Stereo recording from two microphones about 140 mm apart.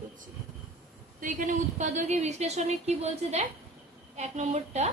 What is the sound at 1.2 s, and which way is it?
A woman's voice, 65° right (ahead or behind).